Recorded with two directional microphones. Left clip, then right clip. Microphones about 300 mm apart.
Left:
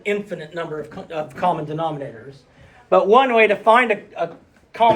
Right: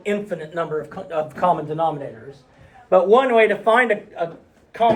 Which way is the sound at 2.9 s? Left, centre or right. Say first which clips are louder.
Even; centre.